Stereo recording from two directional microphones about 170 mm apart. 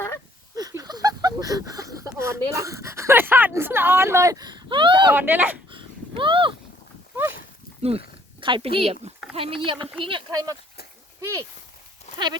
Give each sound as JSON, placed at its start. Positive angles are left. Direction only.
{"t": 0.5, "sound": "speech", "side_deg": -20}
{"t": 5.1, "sound": "speech", "side_deg": -10}
{"t": 5.7, "sound": "a sound", "side_deg": -30}
{"t": 7.8, "sound": "speech", "side_deg": -35}
{"t": 12.1, "sound": "sheep", "side_deg": 40}